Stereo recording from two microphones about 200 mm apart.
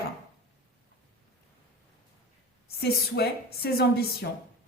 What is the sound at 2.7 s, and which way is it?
A woman's voice, 50° left (ahead or behind).